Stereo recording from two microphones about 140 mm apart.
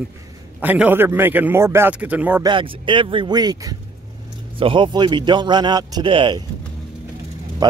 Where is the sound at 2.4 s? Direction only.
35° right (ahead or behind).